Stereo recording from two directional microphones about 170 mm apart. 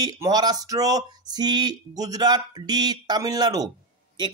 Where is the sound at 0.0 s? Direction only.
25° right (ahead or behind).